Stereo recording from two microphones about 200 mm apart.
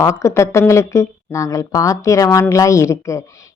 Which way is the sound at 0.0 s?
15° left (ahead or behind).